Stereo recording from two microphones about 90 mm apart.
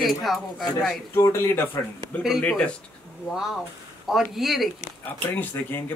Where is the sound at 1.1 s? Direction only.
30° left (ahead or behind).